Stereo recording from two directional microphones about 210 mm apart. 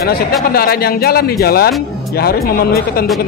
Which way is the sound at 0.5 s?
45° left (ahead or behind).